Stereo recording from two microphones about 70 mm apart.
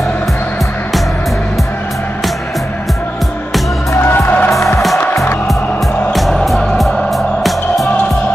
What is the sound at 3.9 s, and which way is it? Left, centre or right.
Music, left.